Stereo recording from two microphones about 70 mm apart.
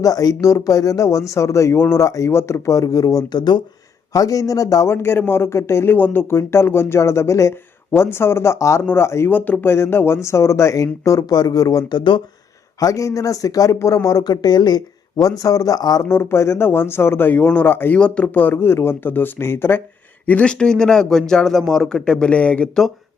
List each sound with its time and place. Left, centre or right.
0.0 s speech: left
2.0 s speech: left
4.1 s speech: left
4.9 s speech: left
9.3 s speech: left
12.8 s speech: left
16.0 s speech: left; by 17.7 s centre
17.7 s speech: left
17.9 s speech: centre
18.5 s speech: left
20.2 s speech: centre